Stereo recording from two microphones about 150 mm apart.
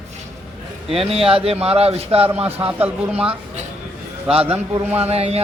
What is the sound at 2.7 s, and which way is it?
Speech, 10° right (ahead or behind).